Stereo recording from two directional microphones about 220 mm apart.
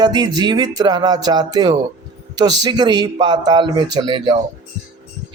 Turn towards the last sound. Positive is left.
turn(degrees=-20)  # may be behind; listen again after turning